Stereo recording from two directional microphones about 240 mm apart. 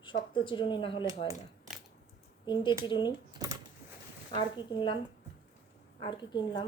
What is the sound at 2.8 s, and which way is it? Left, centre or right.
Speech, centre.